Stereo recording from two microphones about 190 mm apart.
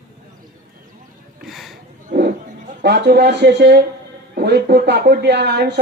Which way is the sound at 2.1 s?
50° right (ahead or behind).